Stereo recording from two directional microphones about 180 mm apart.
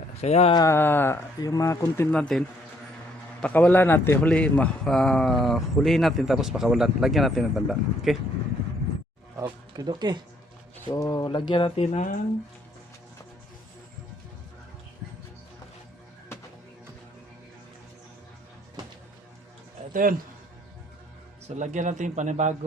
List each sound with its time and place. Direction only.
0.2 s speech: 35° left (ahead or behind)
0.5 s speech: 15° left (ahead or behind)
3.4 s a man's voice: 10° left (ahead or behind)
9.3 s speech: 20° right (ahead or behind)
10.8 s speech: 20° left (ahead or behind)
19.9 s speech: 50° right (ahead or behind)
21.4 s a man's voice: 40° right (ahead or behind)